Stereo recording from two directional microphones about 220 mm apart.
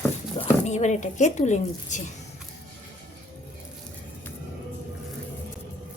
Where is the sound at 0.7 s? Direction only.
30° left (ahead or behind).